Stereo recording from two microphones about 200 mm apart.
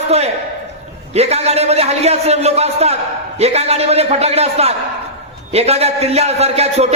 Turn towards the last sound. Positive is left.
turn(degrees=-30)  # may be behind; listen again after turning